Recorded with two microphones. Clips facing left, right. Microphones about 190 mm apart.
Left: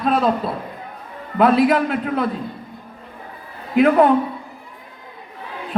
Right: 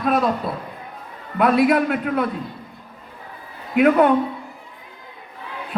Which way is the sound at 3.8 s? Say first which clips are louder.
Left 1 dB; 35° left (ahead or behind).